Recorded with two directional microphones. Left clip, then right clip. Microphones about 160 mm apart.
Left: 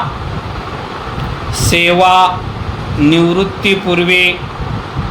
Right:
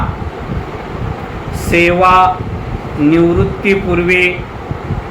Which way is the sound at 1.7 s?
45° left (ahead or behind).